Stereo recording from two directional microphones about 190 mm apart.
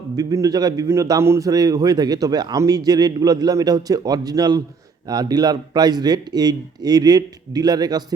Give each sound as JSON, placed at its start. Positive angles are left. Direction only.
{"t": 0.2, "sound": "a man's voice", "side_deg": -20}